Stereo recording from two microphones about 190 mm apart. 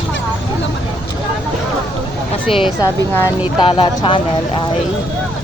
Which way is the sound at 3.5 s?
25° left (ahead or behind).